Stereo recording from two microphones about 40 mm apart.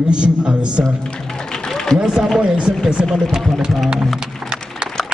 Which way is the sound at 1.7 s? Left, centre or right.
Centre.